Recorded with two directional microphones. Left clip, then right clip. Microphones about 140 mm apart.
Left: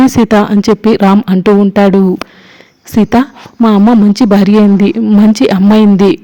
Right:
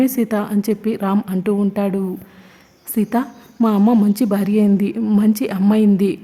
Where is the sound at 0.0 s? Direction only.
40° left (ahead or behind).